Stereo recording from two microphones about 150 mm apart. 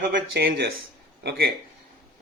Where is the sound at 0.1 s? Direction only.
90° right.